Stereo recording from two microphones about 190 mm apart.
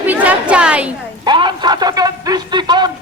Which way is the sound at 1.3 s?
25° right (ahead or behind).